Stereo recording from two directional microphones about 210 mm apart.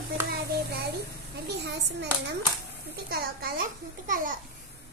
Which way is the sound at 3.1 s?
45° right (ahead or behind).